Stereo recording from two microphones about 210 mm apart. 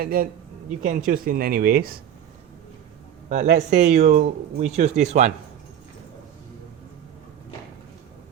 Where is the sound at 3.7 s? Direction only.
35° right (ahead or behind).